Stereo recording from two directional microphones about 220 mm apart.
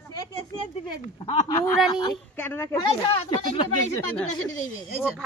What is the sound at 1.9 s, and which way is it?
Speech, 20° left (ahead or behind).